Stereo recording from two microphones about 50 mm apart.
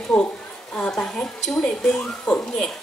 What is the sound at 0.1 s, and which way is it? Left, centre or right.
Speech, left.